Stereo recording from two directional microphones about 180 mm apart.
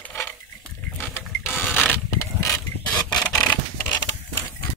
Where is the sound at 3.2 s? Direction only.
10° left (ahead or behind).